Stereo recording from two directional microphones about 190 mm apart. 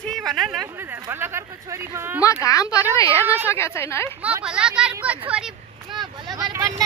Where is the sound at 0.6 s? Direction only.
10° right (ahead or behind).